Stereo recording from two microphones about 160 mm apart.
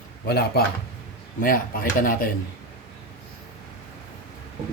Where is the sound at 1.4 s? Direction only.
60° left (ahead or behind).